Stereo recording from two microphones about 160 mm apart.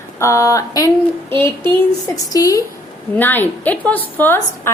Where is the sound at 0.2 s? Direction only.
20° left (ahead or behind).